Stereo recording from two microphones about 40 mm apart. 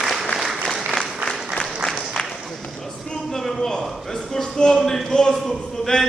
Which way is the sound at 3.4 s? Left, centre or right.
Centre.